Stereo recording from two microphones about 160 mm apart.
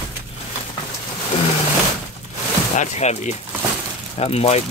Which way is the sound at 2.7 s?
45° left (ahead or behind).